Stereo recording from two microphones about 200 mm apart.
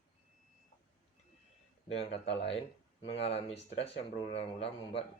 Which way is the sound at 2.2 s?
30° left (ahead or behind).